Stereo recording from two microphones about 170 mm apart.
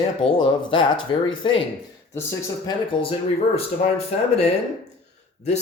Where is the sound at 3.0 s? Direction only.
35° left (ahead or behind).